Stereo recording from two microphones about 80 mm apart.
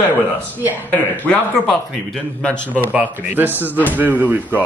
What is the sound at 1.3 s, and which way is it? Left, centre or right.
A man's voice, centre.